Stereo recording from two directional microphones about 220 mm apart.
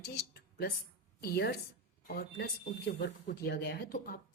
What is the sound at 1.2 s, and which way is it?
Speech, 45° left (ahead or behind).